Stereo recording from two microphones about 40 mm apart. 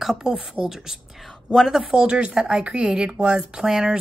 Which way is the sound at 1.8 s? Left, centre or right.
Centre.